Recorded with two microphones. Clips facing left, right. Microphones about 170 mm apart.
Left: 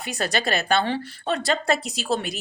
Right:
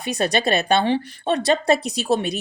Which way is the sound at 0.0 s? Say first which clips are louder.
Right 5 dB; 20° right (ahead or behind).